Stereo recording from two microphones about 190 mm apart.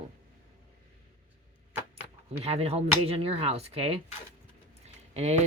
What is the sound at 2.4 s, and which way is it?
Speech, 30° right (ahead or behind).